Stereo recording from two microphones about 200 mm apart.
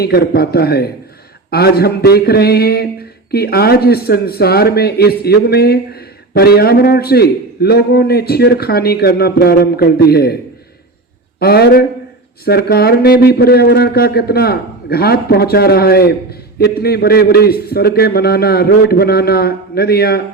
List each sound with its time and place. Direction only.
0.0 s speech: 50° left (ahead or behind)
11.3 s speech: 50° left (ahead or behind)